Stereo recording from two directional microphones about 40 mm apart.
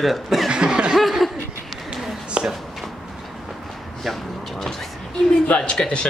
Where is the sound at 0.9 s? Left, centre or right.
Centre.